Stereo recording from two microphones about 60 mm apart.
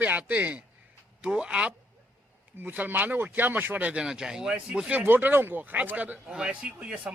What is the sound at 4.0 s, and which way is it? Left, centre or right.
Speech, centre.